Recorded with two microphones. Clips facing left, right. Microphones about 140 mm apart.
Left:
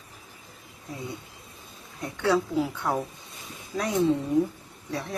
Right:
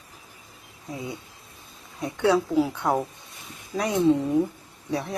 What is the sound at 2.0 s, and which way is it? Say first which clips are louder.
Speech: right 3 dB; 15° right (ahead or behind).